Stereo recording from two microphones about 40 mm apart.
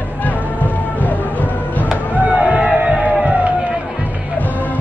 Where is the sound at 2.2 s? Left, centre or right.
Right.